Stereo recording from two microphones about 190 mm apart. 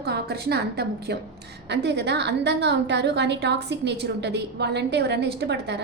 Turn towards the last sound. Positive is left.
turn(degrees=-60)  # may be behind; listen again after turning